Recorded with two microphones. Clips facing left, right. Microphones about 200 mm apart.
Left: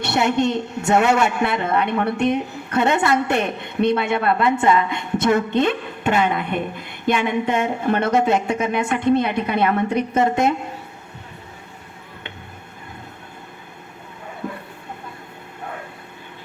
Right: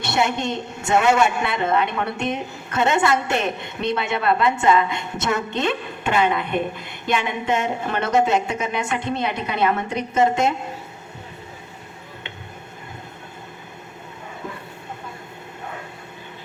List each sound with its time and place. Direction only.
0.0 s a woman's voice: 60° left (ahead or behind)